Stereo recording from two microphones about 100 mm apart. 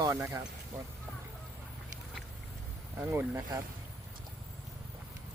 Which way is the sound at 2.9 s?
20° right (ahead or behind).